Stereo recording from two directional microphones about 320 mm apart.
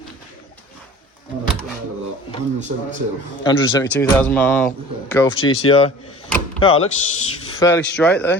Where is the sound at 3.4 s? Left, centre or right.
Centre.